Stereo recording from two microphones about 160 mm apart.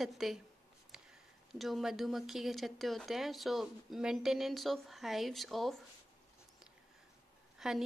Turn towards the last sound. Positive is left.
turn(degrees=-5)  # may be behind; listen again after turning